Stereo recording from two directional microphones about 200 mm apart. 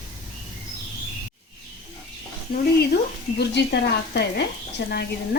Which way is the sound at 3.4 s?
60° left (ahead or behind).